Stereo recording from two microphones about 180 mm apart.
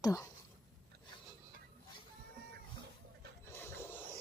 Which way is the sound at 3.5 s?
10° left (ahead or behind).